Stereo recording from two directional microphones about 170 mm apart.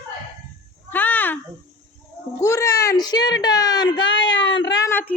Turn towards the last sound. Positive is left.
turn(degrees=10)  # may be behind; listen again after turning